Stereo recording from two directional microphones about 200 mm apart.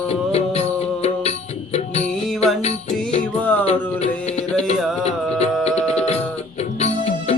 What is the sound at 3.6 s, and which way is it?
Music, 30° left (ahead or behind).